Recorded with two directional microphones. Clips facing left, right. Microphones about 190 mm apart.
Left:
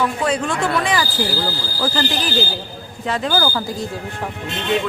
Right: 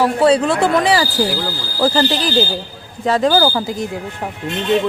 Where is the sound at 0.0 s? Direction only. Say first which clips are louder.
Right 7 dB; 35° right (ahead or behind).